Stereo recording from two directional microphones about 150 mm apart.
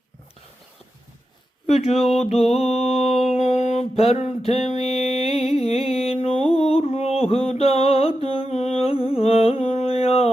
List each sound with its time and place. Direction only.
1.6 s speech: 45° left (ahead or behind)
3.0 s mantra: 45° left (ahead or behind)
4.6 s music: 45° left (ahead or behind)